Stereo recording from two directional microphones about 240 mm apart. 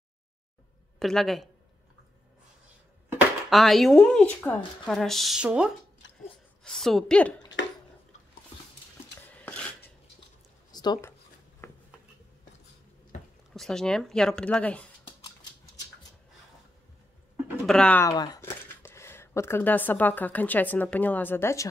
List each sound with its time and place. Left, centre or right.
0.9 s speech: centre
3.1 s speech: centre
6.0 s a sound: left
6.6 s a woman's voice: centre
10.7 s a sound: centre
13.5 s speech: centre
17.6 s speech: centre